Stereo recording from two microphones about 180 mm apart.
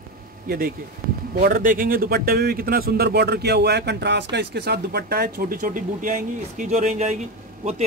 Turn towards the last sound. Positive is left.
turn(degrees=-40)  # may be behind; listen again after turning